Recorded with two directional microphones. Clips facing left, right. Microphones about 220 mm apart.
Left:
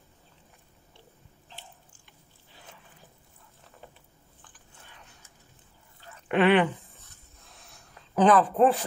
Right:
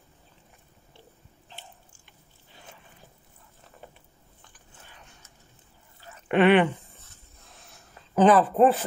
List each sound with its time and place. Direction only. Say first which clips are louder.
6.2 s drip: right 2 dB; centre (ahead or behind)
7.4 s snort: right 1 dB; centre (ahead or behind)
8.2 s a woman's voice: right 2 dB; centre (ahead or behind)